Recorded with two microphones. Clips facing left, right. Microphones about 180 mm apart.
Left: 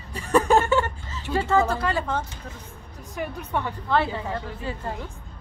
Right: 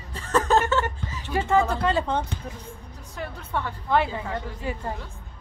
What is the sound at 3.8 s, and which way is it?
Speech, 15° right (ahead or behind).